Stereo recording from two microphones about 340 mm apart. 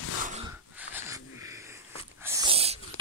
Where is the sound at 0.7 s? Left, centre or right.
Centre.